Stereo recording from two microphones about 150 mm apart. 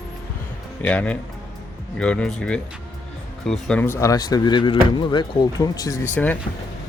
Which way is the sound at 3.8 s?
20° left (ahead or behind).